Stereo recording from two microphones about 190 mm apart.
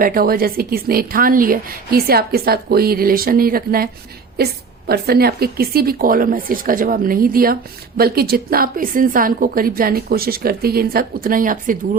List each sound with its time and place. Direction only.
0.0 s a woman's voice: 50° right (ahead or behind)